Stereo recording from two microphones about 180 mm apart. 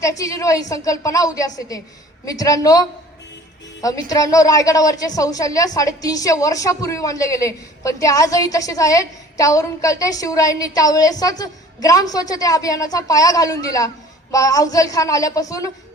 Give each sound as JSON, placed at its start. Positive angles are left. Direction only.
{"t": 0.0, "sound": "a woman's voice", "side_deg": 20}